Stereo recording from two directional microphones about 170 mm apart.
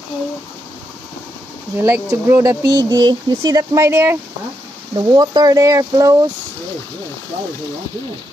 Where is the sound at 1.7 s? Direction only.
15° right (ahead or behind).